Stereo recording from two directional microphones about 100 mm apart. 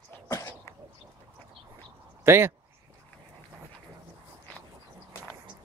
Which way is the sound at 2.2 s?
25° right (ahead or behind).